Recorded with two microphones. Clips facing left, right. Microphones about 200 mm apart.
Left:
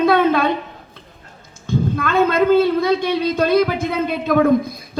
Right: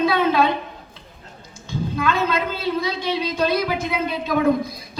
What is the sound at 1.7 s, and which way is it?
A man's voice, 55° left (ahead or behind).